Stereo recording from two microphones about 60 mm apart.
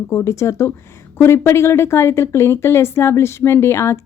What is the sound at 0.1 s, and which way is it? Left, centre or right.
Speech, left.